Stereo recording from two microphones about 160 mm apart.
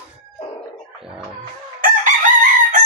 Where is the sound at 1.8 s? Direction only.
55° right (ahead or behind).